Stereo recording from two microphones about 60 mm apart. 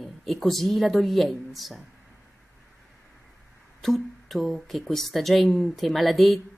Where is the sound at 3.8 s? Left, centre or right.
Centre.